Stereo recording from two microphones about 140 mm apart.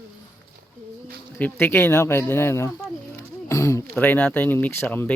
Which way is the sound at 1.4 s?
10° left (ahead or behind).